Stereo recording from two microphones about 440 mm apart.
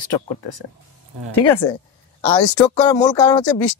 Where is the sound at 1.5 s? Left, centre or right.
Centre.